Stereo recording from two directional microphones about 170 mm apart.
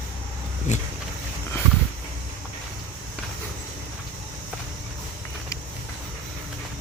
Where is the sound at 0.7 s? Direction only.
45° left (ahead or behind).